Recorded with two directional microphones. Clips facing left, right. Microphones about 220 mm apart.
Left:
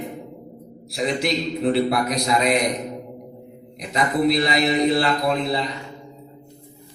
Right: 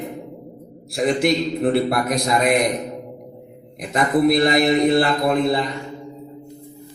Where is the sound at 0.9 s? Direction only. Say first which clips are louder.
Right 5 dB; 50° right (ahead or behind).